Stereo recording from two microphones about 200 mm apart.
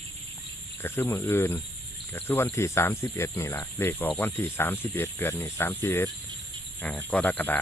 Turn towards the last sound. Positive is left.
turn(degrees=10)  # may be behind; listen again after turning